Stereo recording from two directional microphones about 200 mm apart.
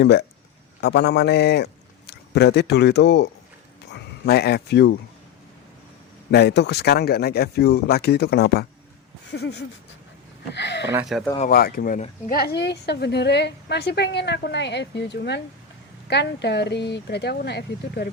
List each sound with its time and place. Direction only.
0.0 s a woman's voice: 55° left (ahead or behind)
6.3 s a woman's voice: 55° left (ahead or behind)
11.4 s speech: 50° left (ahead or behind)
12.4 s a woman's voice: 55° left (ahead or behind)